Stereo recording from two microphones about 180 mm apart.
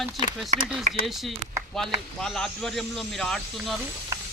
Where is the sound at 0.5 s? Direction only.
40° right (ahead or behind).